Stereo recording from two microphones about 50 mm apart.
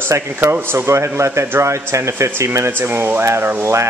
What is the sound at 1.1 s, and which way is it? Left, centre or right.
Speech, right.